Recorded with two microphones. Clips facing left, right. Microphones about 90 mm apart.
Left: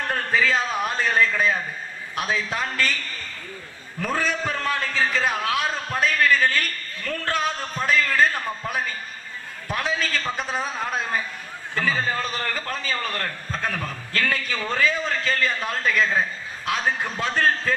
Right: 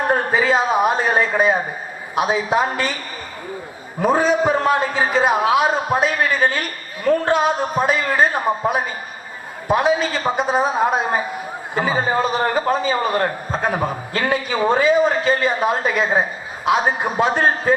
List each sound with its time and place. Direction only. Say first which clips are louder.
0.0 s a sound: right 5 dB; 20° right (ahead or behind)
1.4 s a man's voice: right 6 dB; 20° right (ahead or behind)
4.0 s a man's voice: right 9 dB; 15° right (ahead or behind)